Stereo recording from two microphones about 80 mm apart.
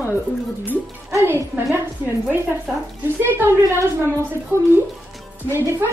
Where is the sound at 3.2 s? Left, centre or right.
Right.